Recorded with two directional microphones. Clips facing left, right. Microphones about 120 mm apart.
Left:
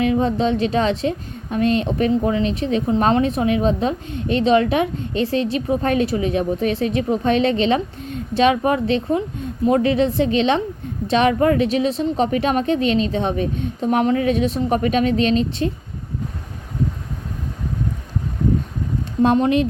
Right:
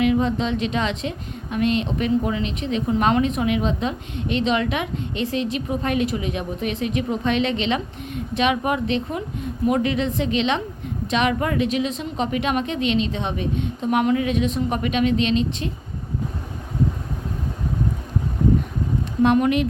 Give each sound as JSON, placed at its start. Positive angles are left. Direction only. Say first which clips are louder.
{"t": 0.0, "sound": "a woman's voice", "louder": "left 2 dB", "side_deg": 35}
{"t": 19.2, "sound": "a woman's voice", "louder": "left 2 dB", "side_deg": 30}